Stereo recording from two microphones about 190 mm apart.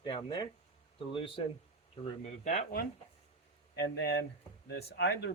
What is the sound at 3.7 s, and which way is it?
Speech, 60° left (ahead or behind).